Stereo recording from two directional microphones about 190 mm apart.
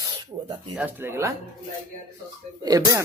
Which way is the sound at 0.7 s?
10° right (ahead or behind).